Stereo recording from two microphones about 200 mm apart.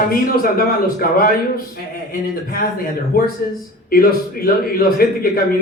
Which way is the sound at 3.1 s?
45° left (ahead or behind).